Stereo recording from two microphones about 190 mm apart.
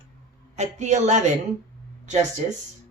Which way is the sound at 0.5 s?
35° right (ahead or behind).